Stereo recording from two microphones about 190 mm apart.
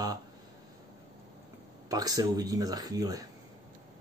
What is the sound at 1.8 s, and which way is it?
Speech, 20° right (ahead or behind).